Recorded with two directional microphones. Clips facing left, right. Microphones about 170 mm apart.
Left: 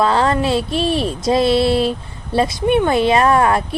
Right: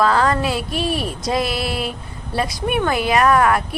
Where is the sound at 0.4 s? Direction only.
25° left (ahead or behind).